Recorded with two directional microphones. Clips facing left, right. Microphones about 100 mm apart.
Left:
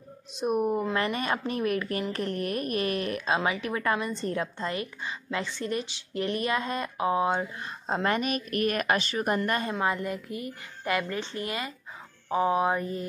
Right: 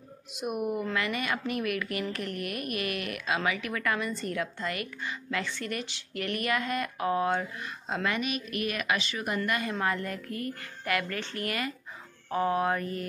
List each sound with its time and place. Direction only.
0.4 s speech: 30° left (ahead or behind)
7.6 s a woman's voice: 35° left (ahead or behind)
9.5 s speech: 30° left (ahead or behind)
9.8 s speech: 15° left (ahead or behind)
12.3 s mantra: 15° left (ahead or behind)